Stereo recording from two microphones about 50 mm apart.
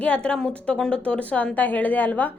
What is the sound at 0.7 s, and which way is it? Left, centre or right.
Speech, centre.